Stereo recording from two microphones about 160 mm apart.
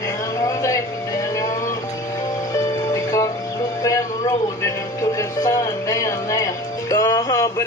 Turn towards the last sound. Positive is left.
turn(degrees=20)  # may be behind; listen again after turning